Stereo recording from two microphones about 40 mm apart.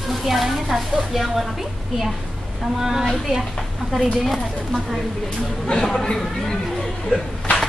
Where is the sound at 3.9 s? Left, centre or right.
Centre.